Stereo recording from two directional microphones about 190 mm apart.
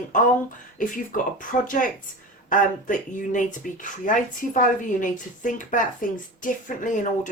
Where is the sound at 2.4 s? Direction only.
45° left (ahead or behind).